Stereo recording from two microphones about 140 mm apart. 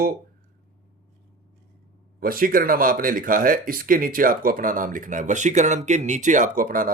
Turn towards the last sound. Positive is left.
turn(degrees=-80)